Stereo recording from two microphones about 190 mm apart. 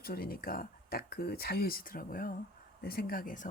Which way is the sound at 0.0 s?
50° left (ahead or behind).